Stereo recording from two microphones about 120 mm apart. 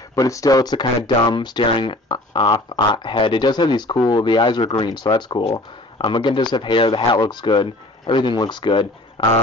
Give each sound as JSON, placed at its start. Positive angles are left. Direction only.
{"t": 0.1, "sound": "speech", "side_deg": 25}
{"t": 5.5, "sound": "speech", "side_deg": 55}
{"t": 6.1, "sound": "speech", "side_deg": 40}
{"t": 9.2, "sound": "a sound", "side_deg": 45}